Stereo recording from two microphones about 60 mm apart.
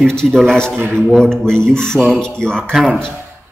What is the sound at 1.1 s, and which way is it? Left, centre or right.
A man's voice, centre.